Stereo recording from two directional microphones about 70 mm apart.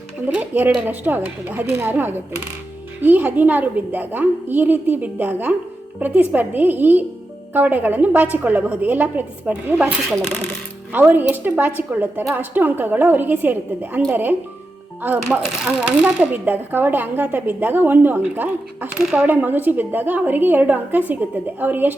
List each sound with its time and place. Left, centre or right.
0.3 s a woman's voice: right
10.9 s a woman's voice: right
15.4 s speech: centre
15.8 s speech: centre
16.3 s a woman's voice: right
18.9 s speech: centre
19.2 s a woman's voice: right